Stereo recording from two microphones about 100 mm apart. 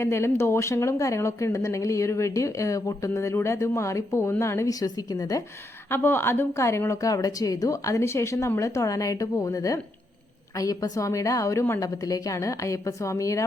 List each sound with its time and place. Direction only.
0.0 s speech: 25° left (ahead or behind)
5.9 s speech: 25° left (ahead or behind)